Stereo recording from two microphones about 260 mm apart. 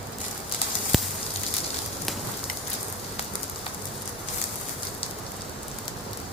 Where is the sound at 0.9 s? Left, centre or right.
Centre.